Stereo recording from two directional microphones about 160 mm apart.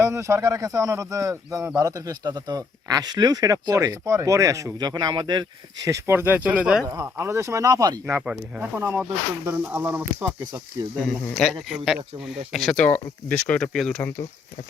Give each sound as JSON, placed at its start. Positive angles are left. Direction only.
{"t": 0.0, "sound": "speech", "side_deg": -20}
{"t": 6.8, "sound": "speech", "side_deg": -20}
{"t": 8.0, "sound": "speech", "side_deg": -5}
{"t": 11.1, "sound": "speech", "side_deg": 0}